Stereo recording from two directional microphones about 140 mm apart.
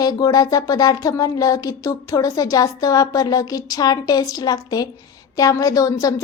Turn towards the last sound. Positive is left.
turn(degrees=25)  # may be behind; listen again after turning